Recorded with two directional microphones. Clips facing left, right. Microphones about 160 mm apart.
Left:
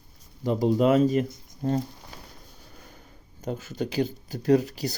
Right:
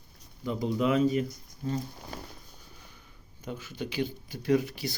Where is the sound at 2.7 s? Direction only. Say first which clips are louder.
Left 5 dB; 45° left (ahead or behind).